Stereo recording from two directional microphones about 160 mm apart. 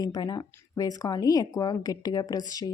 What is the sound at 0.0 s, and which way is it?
Speech, 25° left (ahead or behind).